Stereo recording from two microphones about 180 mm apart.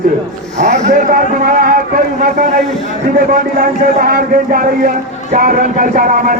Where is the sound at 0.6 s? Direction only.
40° right (ahead or behind).